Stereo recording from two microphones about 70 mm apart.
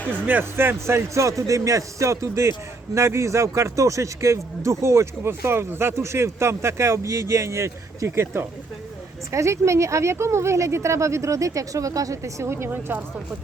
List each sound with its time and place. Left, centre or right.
0.0 s speech: centre
0.3 s speech: right